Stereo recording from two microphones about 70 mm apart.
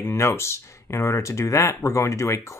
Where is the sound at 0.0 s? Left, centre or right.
Left.